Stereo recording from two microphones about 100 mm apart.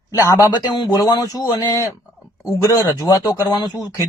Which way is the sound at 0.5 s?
50° left (ahead or behind).